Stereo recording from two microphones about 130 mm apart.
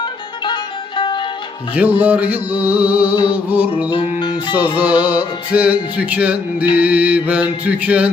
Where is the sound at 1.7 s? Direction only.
15° right (ahead or behind).